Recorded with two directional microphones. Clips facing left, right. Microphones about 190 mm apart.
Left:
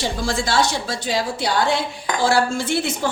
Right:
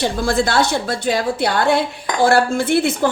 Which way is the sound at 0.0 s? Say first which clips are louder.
Right 5 dB; 60° right (ahead or behind).